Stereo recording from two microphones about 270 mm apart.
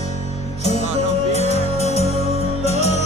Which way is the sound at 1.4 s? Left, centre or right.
Left.